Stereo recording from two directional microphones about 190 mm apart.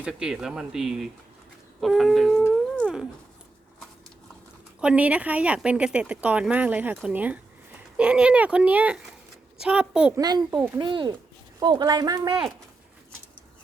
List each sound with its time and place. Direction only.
0.0 s speech: 5° right (ahead or behind)
2.4 s howl: 5° left (ahead or behind)
2.8 s speech: 5° right (ahead or behind)
4.8 s speech: 5° right (ahead or behind)
10.2 s speech: 20° right (ahead or behind)